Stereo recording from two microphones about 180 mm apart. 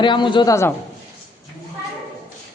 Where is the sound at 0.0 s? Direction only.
25° left (ahead or behind).